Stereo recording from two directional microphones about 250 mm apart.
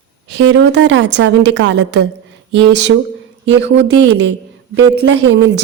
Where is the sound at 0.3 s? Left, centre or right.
Right.